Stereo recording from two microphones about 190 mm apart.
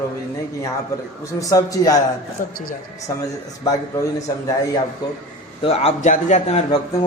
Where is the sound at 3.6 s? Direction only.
20° left (ahead or behind).